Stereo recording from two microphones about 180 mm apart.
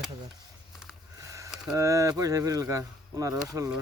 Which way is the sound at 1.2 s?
15° right (ahead or behind).